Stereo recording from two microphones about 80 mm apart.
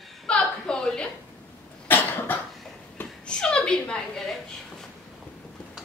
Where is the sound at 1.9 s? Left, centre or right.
Left.